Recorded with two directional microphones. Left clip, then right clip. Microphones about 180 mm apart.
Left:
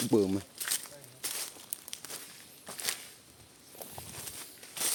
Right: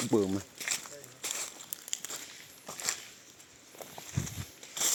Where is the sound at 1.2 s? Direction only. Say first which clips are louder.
Right 1 dB; 25° right (ahead or behind).